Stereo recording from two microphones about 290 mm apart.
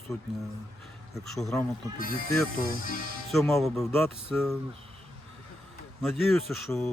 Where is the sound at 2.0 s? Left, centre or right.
Left.